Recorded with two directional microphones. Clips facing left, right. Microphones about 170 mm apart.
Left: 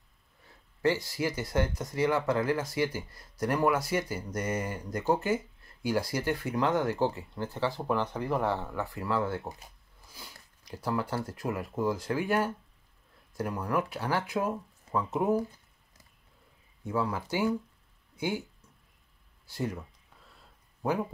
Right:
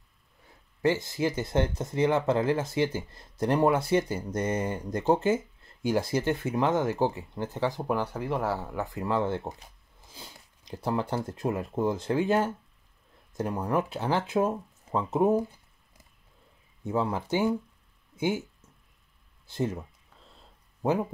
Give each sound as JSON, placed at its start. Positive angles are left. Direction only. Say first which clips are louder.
{"t": 0.8, "sound": "speech", "louder": "right 2 dB", "side_deg": -20}
{"t": 16.8, "sound": "speech", "louder": "right 3 dB", "side_deg": -25}
{"t": 19.5, "sound": "speech", "louder": "right 4 dB", "side_deg": -25}
{"t": 20.3, "sound": "a sound", "louder": "right 3 dB", "side_deg": -20}